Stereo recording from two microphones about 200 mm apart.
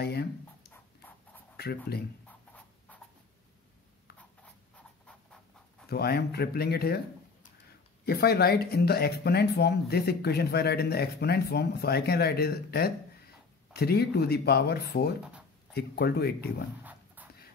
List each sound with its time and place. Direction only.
0.0 s a sound: 55° left (ahead or behind)
0.7 s a sound: 10° left (ahead or behind)
2.2 s writing: 5° left (ahead or behind)
4.7 s writing: 5° left (ahead or behind)
5.9 s speech: 55° left (ahead or behind)
8.0 s speech: 50° left (ahead or behind)
16.8 s dog: 10° right (ahead or behind)